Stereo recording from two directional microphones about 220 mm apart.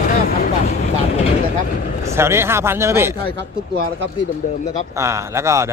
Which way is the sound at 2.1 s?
10° right (ahead or behind).